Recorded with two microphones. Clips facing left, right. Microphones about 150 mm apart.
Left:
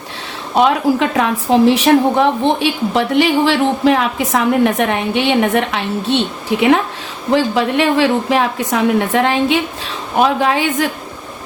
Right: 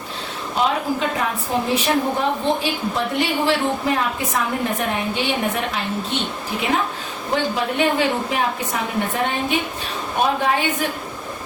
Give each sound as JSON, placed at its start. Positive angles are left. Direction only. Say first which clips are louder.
{"t": 0.5, "sound": "a woman's voice", "louder": "left 8 dB", "side_deg": 80}
{"t": 7.3, "sound": "a woman's voice", "louder": "left 6 dB", "side_deg": 90}